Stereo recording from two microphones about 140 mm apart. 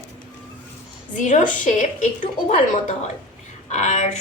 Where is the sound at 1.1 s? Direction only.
60° left (ahead or behind).